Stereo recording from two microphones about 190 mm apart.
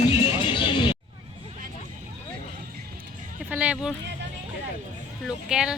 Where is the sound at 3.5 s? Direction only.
5° right (ahead or behind).